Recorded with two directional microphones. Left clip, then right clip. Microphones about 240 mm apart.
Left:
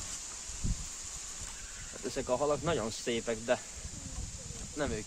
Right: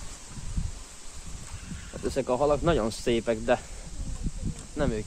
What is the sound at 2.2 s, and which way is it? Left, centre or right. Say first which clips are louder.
Speech: right 6 dB; right.